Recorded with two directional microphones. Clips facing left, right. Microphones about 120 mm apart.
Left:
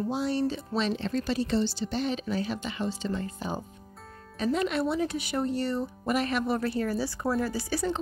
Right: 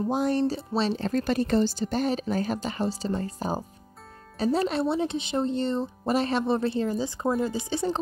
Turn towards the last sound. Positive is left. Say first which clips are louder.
# right 2 dB
turn(degrees=-20)  # may be behind; listen again after turning